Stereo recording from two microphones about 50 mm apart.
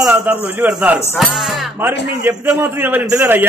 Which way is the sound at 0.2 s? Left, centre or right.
Right.